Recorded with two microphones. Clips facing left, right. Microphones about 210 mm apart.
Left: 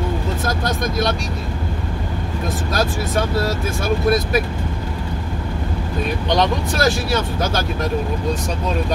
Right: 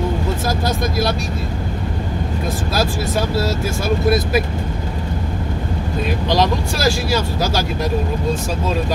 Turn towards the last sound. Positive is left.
turn(degrees=0)  # may be behind; listen again after turning